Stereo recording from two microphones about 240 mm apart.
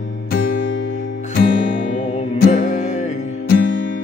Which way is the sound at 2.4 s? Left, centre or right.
Left.